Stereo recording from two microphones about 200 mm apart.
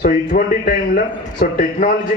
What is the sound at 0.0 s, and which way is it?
A man's voice, 45° left (ahead or behind).